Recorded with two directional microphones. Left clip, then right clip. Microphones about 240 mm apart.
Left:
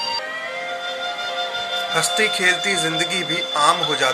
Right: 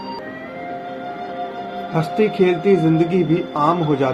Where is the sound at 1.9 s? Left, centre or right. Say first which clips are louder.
Right 2 dB; centre.